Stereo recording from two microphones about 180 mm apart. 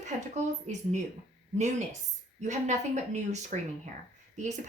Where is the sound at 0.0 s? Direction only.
40° right (ahead or behind).